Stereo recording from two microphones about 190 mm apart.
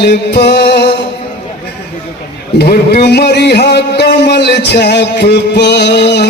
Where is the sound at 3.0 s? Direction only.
60° left (ahead or behind).